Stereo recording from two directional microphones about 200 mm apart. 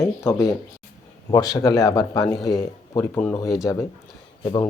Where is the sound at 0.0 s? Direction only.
15° left (ahead or behind).